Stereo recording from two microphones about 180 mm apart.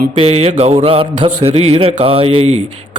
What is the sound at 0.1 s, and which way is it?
Speech, 35° right (ahead or behind).